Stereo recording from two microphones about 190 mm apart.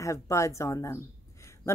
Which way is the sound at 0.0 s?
15° left (ahead or behind).